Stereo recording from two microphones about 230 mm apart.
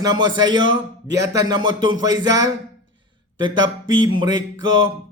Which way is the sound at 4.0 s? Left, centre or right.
Centre.